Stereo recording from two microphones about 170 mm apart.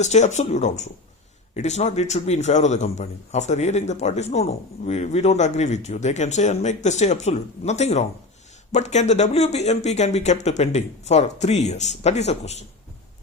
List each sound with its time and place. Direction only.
0.0 s a man's voice: 40° left (ahead or behind)